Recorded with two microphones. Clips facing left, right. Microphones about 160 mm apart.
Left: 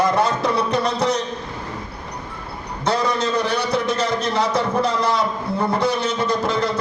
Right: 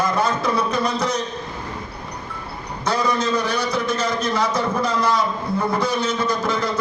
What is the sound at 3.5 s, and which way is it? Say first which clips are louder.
A man's voice: left 1 dB; 65° left (ahead or behind).